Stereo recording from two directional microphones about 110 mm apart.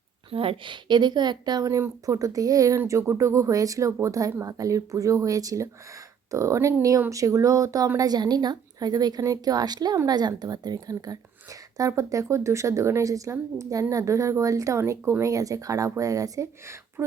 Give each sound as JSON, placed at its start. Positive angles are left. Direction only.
{"t": 0.3, "sound": "a woman's voice", "side_deg": -55}